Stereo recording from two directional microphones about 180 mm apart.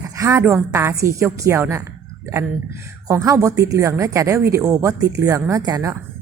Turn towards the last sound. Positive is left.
turn(degrees=-20)  # may be behind; listen again after turning